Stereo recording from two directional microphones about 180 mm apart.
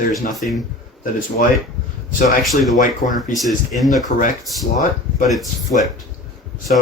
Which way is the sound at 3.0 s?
45° left (ahead or behind).